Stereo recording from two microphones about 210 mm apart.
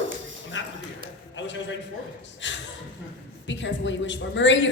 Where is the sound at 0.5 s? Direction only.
60° left (ahead or behind).